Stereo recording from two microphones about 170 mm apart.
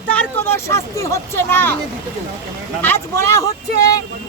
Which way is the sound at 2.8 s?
15° left (ahead or behind).